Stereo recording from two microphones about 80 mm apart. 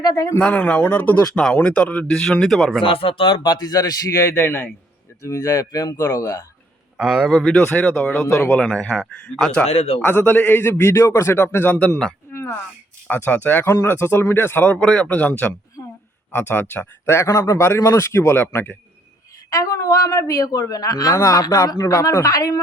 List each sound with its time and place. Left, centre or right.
0.3 s speech: centre
2.8 s speech: left
5.2 s speech: left
6.9 s a man's voice: centre
7.6 s a man's voice: centre
8.5 s speech: centre
9.6 s a man's voice: left
12.3 s a sound: left
13.1 s a man's voice: left
14.7 s speech: centre; by 18.7 s left
19.5 s speech: left